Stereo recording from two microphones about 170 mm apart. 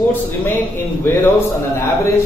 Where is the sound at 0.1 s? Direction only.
15° left (ahead or behind).